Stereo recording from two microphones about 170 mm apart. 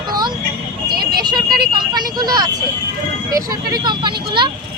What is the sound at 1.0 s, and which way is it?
Vehicle, 25° right (ahead or behind).